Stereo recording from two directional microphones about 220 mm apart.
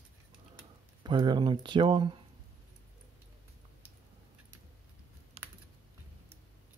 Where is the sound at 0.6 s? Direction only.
20° right (ahead or behind).